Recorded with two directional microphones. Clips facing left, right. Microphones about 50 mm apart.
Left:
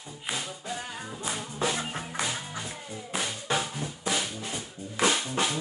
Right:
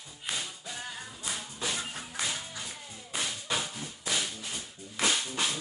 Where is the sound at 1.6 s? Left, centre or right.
Left.